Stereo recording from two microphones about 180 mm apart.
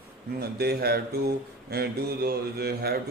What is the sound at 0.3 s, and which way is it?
A man's voice, 60° right (ahead or behind).